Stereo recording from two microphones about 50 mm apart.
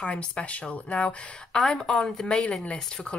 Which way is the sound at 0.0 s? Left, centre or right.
Left.